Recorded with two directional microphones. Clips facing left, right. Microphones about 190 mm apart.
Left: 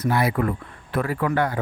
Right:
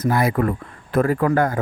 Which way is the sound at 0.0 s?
45° right (ahead or behind).